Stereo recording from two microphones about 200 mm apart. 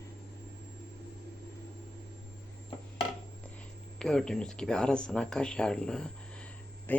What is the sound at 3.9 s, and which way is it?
Speech, 5° left (ahead or behind).